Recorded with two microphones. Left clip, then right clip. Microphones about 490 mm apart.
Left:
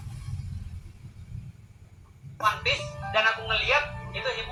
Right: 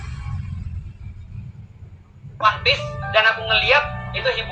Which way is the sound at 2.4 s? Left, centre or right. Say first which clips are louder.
Right 8 dB; left.